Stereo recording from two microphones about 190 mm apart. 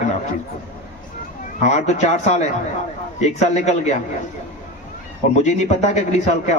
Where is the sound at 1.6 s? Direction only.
35° left (ahead or behind).